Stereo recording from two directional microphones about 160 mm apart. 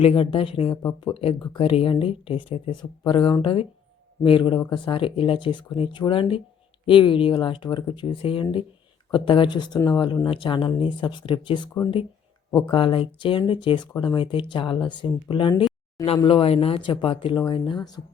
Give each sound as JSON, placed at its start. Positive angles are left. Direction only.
{"t": 0.0, "sound": "speech", "side_deg": 35}
{"t": 12.7, "sound": "speech", "side_deg": 35}